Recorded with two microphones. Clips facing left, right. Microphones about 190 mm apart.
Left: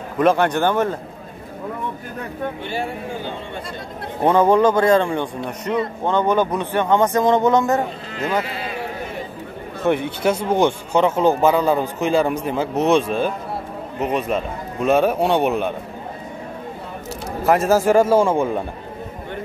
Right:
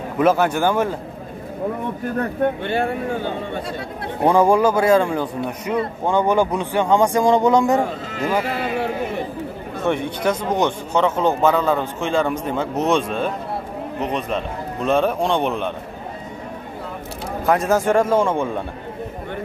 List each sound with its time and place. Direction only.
0.2 s speech: 5° right (ahead or behind)
2.4 s speech: 60° right (ahead or behind)
4.2 s speech: 10° right (ahead or behind)
8.5 s a sound: 65° right (ahead or behind)
9.8 s speech: 5° left (ahead or behind)
17.5 s speech: 5° left (ahead or behind)